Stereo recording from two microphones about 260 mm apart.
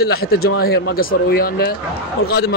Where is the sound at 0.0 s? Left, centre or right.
Left.